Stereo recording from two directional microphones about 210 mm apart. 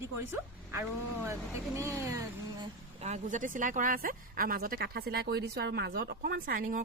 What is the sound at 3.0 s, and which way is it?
A woman's voice, 30° right (ahead or behind).